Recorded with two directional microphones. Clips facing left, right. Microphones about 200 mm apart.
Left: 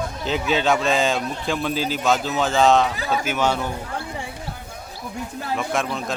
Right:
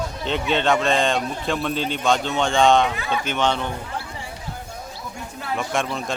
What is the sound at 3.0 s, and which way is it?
Speech, 40° left (ahead or behind).